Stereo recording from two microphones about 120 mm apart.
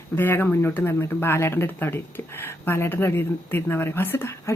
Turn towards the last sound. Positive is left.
turn(degrees=20)  # may be behind; listen again after turning